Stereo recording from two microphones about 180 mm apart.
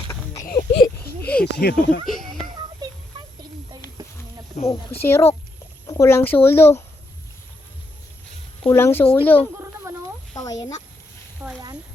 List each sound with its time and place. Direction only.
0.4 s speech: 55° left (ahead or behind)
1.2 s speech: 5° left (ahead or behind)
1.5 s speech: 65° left (ahead or behind)
2.0 s a sound: centre (ahead or behind)
4.0 s a sound: 20° right (ahead or behind)
4.6 s speech: 40° left (ahead or behind)
4.9 s speech: 15° left (ahead or behind)
8.6 s speech: 10° left (ahead or behind)
11.4 s speech: 10° right (ahead or behind)